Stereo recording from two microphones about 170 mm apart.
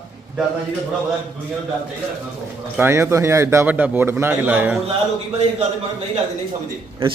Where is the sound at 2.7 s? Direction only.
15° right (ahead or behind).